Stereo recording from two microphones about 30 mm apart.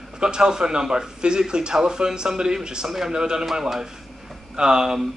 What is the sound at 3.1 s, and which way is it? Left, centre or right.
Speech, right.